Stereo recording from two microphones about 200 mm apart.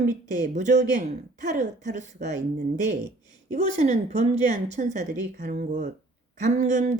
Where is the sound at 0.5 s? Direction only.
35° right (ahead or behind).